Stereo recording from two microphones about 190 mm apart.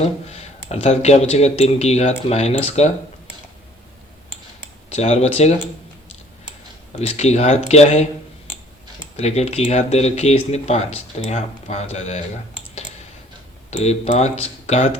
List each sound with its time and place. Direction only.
0.0 s speech: 35° left (ahead or behind)
4.9 s speech: 35° left (ahead or behind)
7.0 s speech: 35° left (ahead or behind)
9.1 s speech: 35° left (ahead or behind)
13.7 s speech: 35° left (ahead or behind)